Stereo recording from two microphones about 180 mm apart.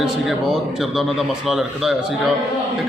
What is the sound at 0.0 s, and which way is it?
A man's voice, centre (ahead or behind).